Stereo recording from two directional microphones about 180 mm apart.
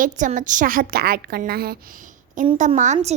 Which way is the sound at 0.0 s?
45° right (ahead or behind).